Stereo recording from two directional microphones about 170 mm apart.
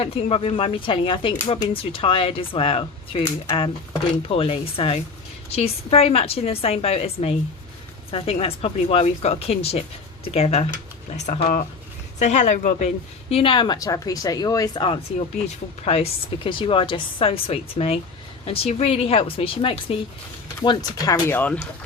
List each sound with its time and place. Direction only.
0.0 s a woman's voice: 35° left (ahead or behind)
13.3 s speech: 30° left (ahead or behind)
15.4 s speech: 40° left (ahead or behind)
20.6 s speech: 20° left (ahead or behind)